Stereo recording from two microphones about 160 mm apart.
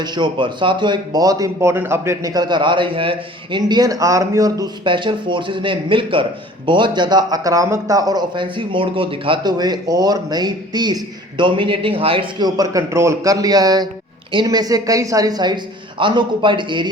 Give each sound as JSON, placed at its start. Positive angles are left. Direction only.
{"t": 0.0, "sound": "speech", "side_deg": -30}